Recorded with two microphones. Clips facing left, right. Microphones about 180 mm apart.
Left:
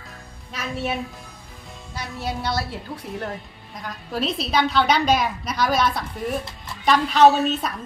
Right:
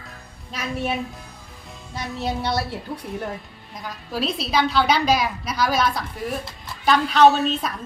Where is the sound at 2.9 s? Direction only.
Centre (ahead or behind).